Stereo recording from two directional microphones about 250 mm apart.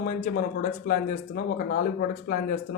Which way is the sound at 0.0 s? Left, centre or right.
Left.